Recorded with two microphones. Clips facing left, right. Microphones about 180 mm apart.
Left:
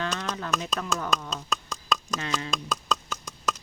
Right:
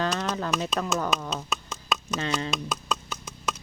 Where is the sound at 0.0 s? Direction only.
35° right (ahead or behind).